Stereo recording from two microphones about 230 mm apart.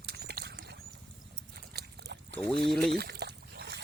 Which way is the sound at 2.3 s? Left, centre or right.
Centre.